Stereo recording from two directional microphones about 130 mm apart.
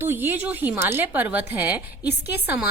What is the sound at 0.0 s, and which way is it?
A woman's voice, 15° right (ahead or behind).